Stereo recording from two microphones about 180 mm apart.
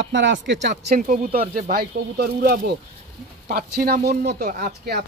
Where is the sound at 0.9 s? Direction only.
50° right (ahead or behind).